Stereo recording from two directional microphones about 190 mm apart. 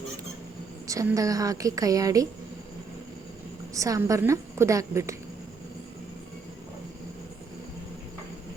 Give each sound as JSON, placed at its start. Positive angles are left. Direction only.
{"t": 0.9, "sound": "a woman's voice", "side_deg": -15}
{"t": 3.8, "sound": "a woman's voice", "side_deg": -15}